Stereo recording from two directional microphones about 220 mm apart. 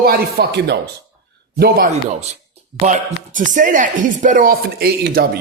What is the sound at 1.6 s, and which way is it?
Speech, 35° right (ahead or behind).